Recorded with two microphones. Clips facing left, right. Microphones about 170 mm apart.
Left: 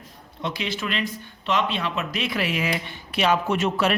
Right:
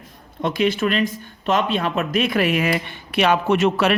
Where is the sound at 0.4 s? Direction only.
50° right (ahead or behind).